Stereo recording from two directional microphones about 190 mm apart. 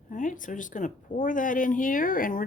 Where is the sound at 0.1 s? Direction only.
45° left (ahead or behind).